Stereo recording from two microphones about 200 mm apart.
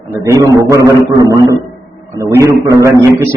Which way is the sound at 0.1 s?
15° right (ahead or behind).